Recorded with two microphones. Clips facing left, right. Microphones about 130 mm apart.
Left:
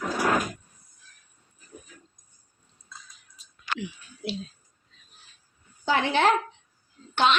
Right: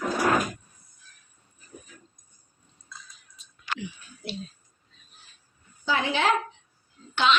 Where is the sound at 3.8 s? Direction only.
90° left.